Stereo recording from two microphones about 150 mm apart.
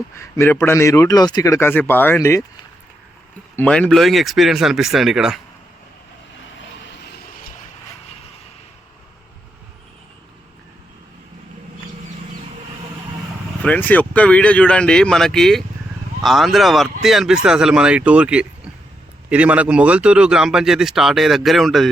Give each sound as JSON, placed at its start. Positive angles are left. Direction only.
{"t": 0.2, "sound": "a man's voice", "side_deg": 15}
{"t": 3.5, "sound": "speech", "side_deg": 10}
{"t": 13.6, "sound": "speech", "side_deg": 10}